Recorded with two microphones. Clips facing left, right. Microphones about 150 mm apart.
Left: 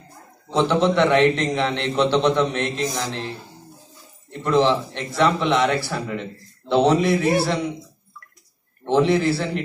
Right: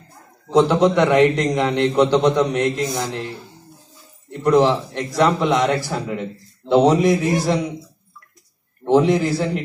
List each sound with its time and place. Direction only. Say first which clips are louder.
0.5 s a man's voice: right 4 dB; 15° right (ahead or behind)
4.4 s a man's voice: right 3 dB; 15° right (ahead or behind)
8.8 s a man's voice: right 2 dB; 15° right (ahead or behind)